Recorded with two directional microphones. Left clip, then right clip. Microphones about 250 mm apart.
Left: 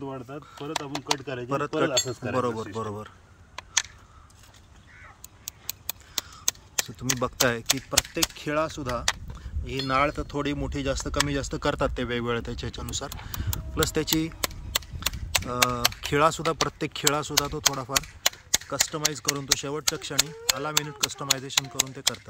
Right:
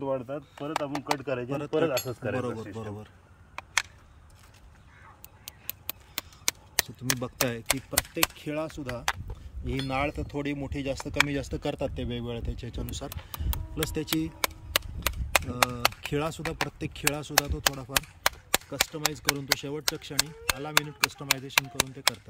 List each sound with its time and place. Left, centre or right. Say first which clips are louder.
0.0 s speech: right 5 dB; centre
1.5 s speech: left 3 dB; centre
5.4 s a sound: left 5 dB; right
7.0 s speech: left 4 dB; centre